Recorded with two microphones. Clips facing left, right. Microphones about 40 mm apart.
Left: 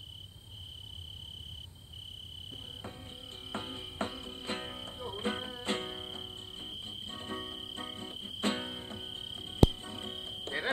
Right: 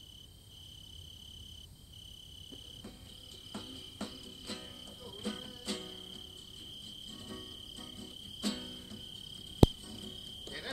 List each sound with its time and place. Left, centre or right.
3.5 s music: left